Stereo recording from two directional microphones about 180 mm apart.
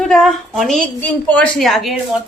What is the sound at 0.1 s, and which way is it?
A woman's voice, centre (ahead or behind).